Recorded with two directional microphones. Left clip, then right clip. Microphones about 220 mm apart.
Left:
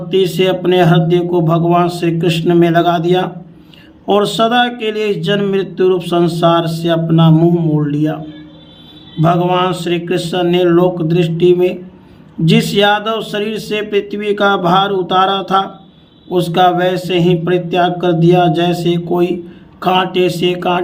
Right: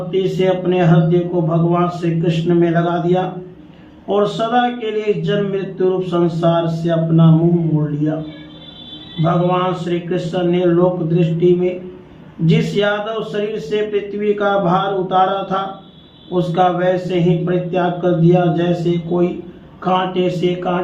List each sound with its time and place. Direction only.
0.1 s speech: 55° left (ahead or behind)
9.2 s speech: 55° left (ahead or behind)